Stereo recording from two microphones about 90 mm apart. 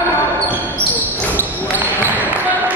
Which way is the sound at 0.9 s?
20° right (ahead or behind).